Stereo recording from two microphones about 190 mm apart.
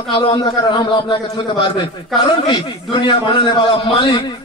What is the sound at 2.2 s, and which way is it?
A man's voice, 25° left (ahead or behind).